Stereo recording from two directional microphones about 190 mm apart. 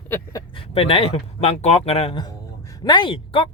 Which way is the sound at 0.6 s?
30° left (ahead or behind).